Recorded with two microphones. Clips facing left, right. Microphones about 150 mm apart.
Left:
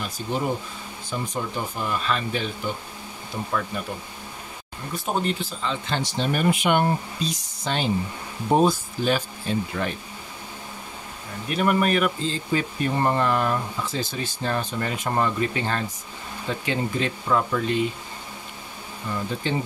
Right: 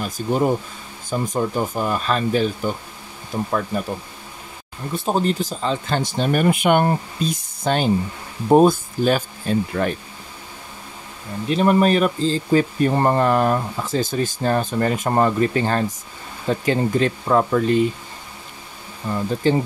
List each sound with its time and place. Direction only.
0.0 s speech: 45° right (ahead or behind)
4.9 s speech: 35° right (ahead or behind); by 9.9 s 50° right (ahead or behind)
11.4 s speech: 25° right (ahead or behind)
19.1 s speech: 35° right (ahead or behind)